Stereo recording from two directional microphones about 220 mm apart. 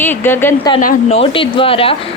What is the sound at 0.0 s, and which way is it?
Speech, 10° left (ahead or behind).